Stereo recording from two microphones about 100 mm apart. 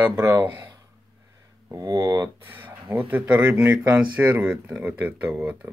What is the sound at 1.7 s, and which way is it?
Speech, 35° right (ahead or behind).